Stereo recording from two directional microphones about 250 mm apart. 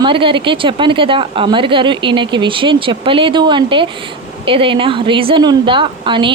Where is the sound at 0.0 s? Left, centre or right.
Right.